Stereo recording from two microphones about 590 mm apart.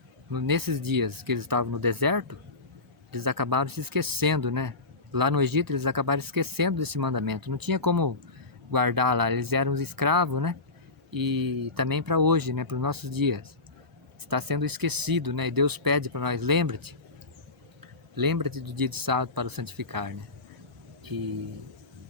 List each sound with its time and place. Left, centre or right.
0.3 s speech: right
18.1 s speech: right